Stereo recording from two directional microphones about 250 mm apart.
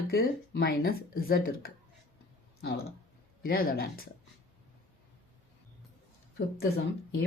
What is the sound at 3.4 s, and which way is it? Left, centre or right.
Speech, left.